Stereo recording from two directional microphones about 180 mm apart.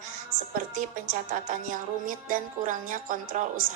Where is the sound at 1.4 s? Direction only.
45° right (ahead or behind).